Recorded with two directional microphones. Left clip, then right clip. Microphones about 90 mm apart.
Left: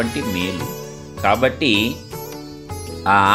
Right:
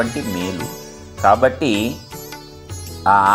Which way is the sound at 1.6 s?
25° left (ahead or behind).